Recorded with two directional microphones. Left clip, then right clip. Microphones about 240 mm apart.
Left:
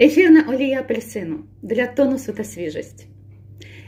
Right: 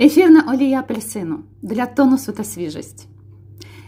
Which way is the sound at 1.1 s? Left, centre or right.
Right.